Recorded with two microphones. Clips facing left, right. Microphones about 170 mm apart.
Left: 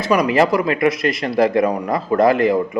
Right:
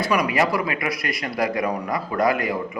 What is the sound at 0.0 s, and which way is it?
A man's voice, 25° left (ahead or behind).